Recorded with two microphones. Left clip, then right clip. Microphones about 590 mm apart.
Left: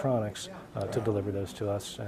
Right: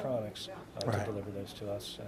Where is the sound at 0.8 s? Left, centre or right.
Left.